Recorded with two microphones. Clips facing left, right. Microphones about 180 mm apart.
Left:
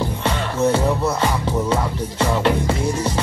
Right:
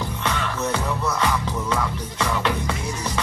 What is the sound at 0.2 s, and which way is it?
Music, 30° left (ahead or behind).